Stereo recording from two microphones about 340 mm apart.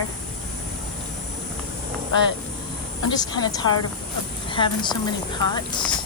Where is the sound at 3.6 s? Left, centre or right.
Left.